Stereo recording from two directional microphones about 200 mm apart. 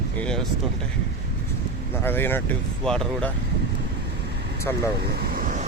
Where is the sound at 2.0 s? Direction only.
10° left (ahead or behind).